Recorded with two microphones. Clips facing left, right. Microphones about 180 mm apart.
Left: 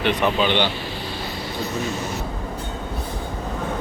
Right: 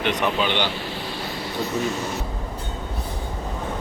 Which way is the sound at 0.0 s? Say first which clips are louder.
Left 2 dB; 15° right (ahead or behind).